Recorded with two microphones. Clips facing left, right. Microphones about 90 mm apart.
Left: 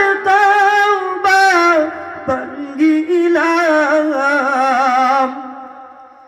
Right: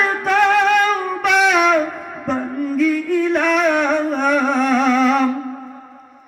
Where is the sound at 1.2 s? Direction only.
65° left (ahead or behind).